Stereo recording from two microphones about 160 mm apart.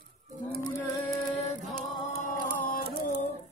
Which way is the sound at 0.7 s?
20° left (ahead or behind).